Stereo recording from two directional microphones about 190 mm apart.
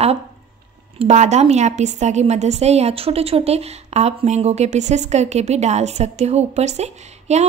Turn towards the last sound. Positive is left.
turn(degrees=-35)  # may be behind; listen again after turning